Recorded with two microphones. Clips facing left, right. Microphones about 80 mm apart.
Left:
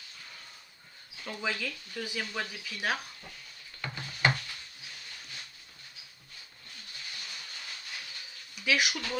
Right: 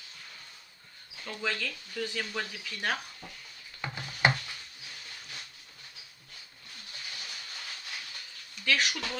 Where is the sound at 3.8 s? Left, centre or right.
Centre.